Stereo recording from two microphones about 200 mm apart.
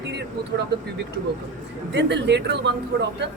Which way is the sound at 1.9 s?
60° right (ahead or behind).